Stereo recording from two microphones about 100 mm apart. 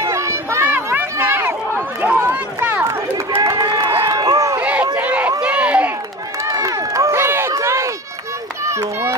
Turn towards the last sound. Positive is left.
turn(degrees=-30)  # may be behind; listen again after turning